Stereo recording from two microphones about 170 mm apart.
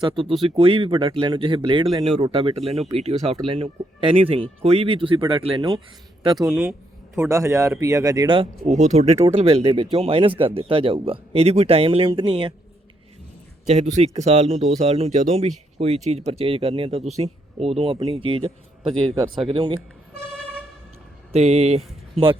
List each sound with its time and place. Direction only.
0.0 s speech: 30° right (ahead or behind)
6.3 s speech: centre (ahead or behind)
7.2 s speech: 15° right (ahead or behind)
8.6 s speech: 45° right (ahead or behind); by 12.5 s 30° right (ahead or behind)
13.7 s speech: 40° right (ahead or behind)
21.3 s speech: 40° right (ahead or behind)